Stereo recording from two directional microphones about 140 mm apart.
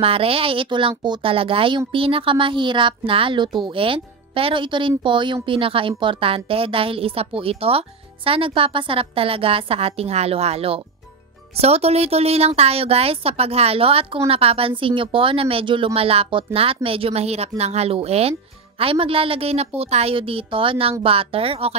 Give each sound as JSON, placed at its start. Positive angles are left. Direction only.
{"t": 0.0, "sound": "speech", "side_deg": -40}